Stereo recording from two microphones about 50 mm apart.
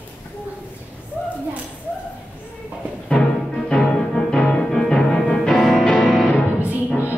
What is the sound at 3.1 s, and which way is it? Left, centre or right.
Music, centre.